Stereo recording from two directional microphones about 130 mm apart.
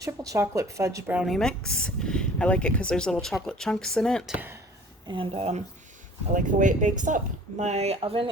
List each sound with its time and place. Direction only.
0.3 s speech: 25° right (ahead or behind)
1.1 s speech: centre (ahead or behind)
5.0 s speech: 40° right (ahead or behind)
6.3 s speech: 75° right (ahead or behind)
7.6 s speech: 60° right (ahead or behind)